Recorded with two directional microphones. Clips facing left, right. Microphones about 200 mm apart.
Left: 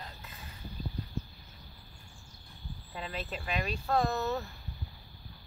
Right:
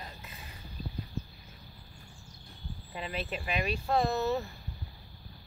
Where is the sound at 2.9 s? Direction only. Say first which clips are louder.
Right 2 dB; 10° right (ahead or behind).